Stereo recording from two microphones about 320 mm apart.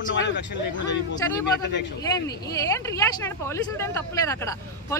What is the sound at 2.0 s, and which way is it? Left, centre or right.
Speech, centre.